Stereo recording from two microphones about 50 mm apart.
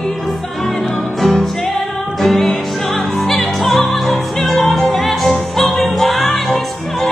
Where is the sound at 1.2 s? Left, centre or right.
Centre.